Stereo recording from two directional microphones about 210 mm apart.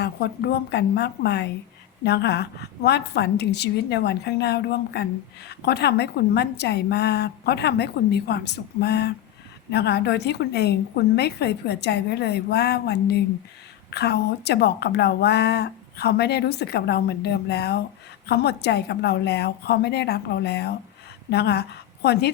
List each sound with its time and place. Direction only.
0.0 s a woman's voice: 50° left (ahead or behind)